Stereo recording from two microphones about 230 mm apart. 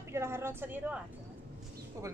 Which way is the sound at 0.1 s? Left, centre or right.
Centre.